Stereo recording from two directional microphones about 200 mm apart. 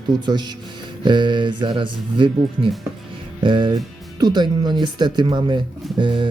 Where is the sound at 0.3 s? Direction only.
20° right (ahead or behind).